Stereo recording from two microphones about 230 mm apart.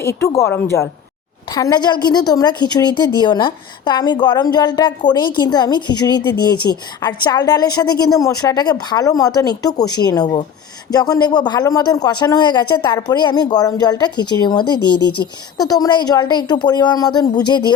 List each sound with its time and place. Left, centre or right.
0.0 s a woman's voice: centre
15.5 s a woman's voice: centre